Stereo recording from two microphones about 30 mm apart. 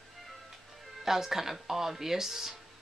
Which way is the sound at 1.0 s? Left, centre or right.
Centre.